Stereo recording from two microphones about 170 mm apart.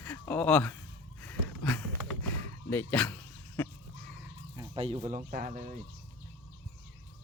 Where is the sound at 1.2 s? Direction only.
10° left (ahead or behind).